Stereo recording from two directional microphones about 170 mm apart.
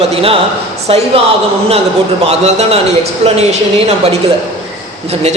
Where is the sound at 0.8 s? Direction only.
35° right (ahead or behind).